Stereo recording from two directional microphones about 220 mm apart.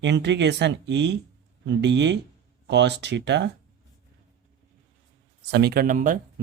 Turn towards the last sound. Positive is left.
turn(degrees=-35)  # may be behind; listen again after turning